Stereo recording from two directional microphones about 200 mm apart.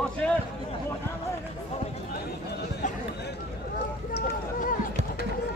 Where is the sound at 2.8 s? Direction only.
40° left (ahead or behind).